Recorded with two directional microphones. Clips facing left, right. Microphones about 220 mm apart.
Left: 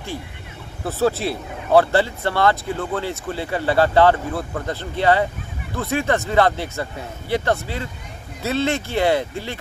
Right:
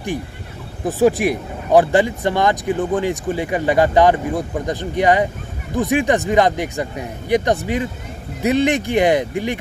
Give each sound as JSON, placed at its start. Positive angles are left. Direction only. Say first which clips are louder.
{"t": 0.8, "sound": "speech", "louder": "right 5 dB", "side_deg": -15}